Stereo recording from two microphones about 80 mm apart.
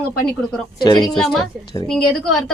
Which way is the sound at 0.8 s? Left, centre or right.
Left.